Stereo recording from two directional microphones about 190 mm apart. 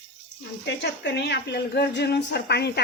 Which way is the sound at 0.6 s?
65° left (ahead or behind).